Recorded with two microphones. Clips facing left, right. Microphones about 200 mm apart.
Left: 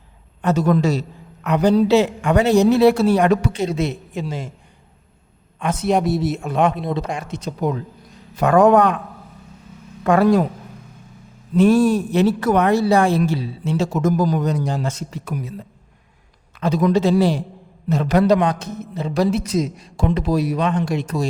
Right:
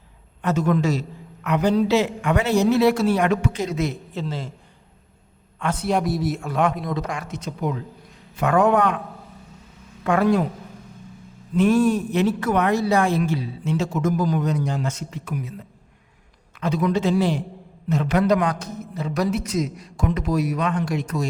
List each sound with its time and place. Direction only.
0.4 s speech: 35° left (ahead or behind)
4.1 s a man's voice: 15° left (ahead or behind)
5.8 s speech: 25° left (ahead or behind); by 9.0 s 40° left (ahead or behind)
10.0 s speech: 40° left (ahead or behind)
11.5 s speech: 35° left (ahead or behind)